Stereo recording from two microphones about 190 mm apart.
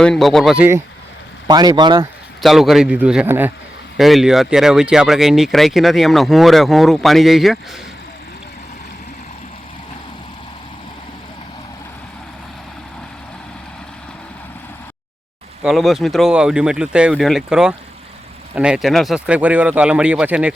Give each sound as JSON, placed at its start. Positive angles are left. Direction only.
{"t": 0.0, "sound": "speech", "side_deg": 0}
{"t": 1.5, "sound": "speech", "side_deg": -20}
{"t": 2.4, "sound": "speech", "side_deg": 0}
{"t": 15.6, "sound": "speech", "side_deg": 0}